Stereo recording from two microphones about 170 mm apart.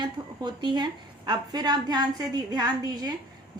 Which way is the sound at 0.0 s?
25° right (ahead or behind).